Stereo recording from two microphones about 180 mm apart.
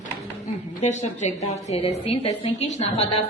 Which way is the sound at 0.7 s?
40° left (ahead or behind).